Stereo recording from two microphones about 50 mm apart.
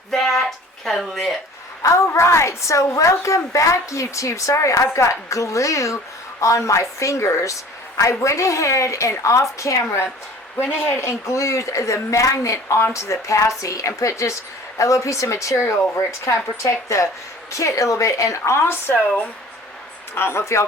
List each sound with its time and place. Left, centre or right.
0.1 s a sound: centre
0.9 s speech: centre
1.8 s speech: left
10.8 s speech: left
18.6 s speech: left
18.9 s speech: left
20.1 s speech: left